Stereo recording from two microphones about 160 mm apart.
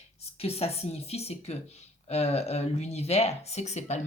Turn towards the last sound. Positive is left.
turn(degrees=45)  # may be behind; listen again after turning